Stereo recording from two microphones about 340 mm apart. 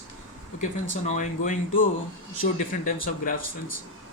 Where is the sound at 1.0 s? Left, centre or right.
Left.